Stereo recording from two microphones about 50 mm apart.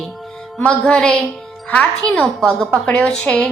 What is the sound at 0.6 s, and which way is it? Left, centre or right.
Speech, left.